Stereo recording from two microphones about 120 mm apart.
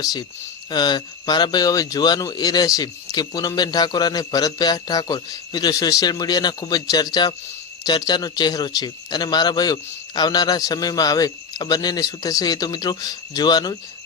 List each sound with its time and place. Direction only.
0.0 s speech: 30° left (ahead or behind)